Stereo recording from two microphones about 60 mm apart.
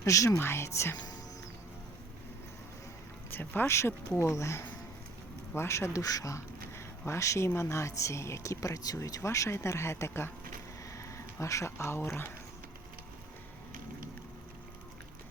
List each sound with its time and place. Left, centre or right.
0.0 s speech: left
0.3 s speech: left
3.2 s speech: left
3.7 s speech: left
9.2 s speech: left
10.9 s speech: left